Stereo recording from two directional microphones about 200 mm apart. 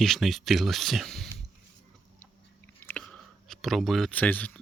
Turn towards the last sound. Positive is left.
turn(degrees=5)  # may be behind; listen again after turning